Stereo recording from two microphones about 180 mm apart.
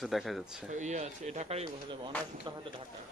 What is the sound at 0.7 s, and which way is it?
Speech, 40° right (ahead or behind).